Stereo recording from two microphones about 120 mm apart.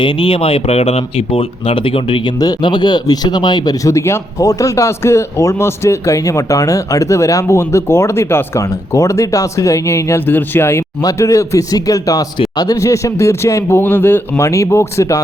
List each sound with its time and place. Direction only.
0.0 s speech: 45° left (ahead or behind)
2.4 s speech: 35° left (ahead or behind)